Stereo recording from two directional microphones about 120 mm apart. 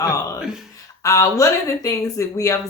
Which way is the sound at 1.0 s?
25° left (ahead or behind).